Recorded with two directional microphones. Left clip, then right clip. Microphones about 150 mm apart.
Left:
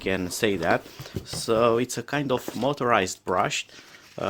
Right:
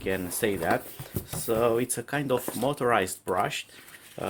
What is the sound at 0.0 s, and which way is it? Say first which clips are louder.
Speech: left 3 dB; 45° left (ahead or behind).